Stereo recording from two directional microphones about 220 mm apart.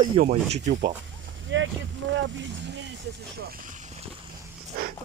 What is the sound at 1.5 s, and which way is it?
Speech, 55° right (ahead or behind).